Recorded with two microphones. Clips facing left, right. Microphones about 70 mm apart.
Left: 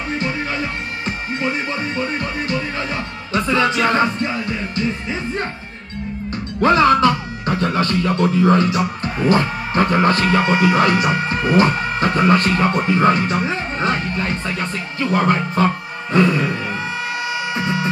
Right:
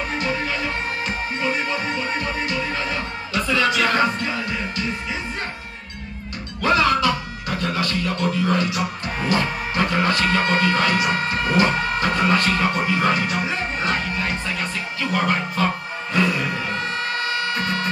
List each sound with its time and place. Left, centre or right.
3.3 s music: left
6.6 s speech: left
10.3 s speech: centre
10.8 s speech: left
15.6 s music: left
17.6 s music: centre